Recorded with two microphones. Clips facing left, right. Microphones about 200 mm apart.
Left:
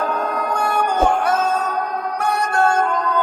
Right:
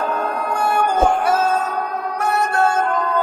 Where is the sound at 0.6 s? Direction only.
5° right (ahead or behind).